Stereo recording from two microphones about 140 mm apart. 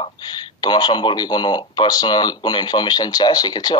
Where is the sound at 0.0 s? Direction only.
30° left (ahead or behind).